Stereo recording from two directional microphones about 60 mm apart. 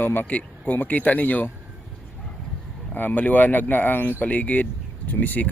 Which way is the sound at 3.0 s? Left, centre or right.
Left.